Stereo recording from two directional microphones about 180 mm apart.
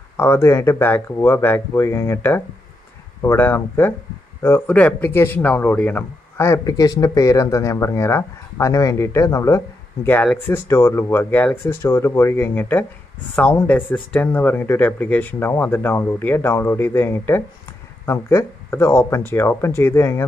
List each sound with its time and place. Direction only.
0.2 s speech: 15° left (ahead or behind)